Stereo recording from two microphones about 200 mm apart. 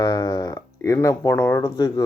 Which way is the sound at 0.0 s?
15° left (ahead or behind).